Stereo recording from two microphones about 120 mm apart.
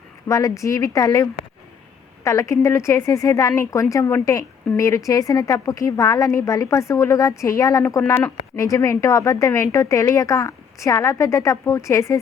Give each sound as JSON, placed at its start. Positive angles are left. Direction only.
{"t": 0.3, "sound": "a woman's voice", "side_deg": 25}